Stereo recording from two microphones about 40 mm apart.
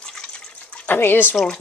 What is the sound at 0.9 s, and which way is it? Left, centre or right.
Speech, left.